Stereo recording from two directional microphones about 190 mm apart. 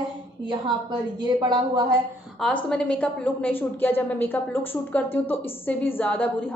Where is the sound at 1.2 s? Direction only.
25° right (ahead or behind).